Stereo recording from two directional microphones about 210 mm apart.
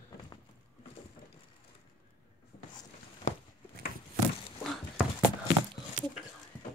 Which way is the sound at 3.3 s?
35° left (ahead or behind).